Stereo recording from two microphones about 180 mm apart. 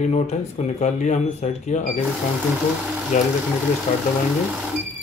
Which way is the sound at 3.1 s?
45° left (ahead or behind).